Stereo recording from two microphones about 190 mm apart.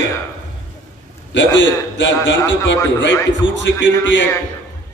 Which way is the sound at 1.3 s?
70° left (ahead or behind).